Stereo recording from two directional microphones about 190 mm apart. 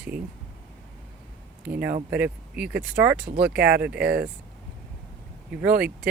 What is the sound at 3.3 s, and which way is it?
Speech, 55° right (ahead or behind).